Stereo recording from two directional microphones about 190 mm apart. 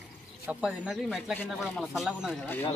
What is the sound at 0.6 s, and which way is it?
Speech, 5° right (ahead or behind).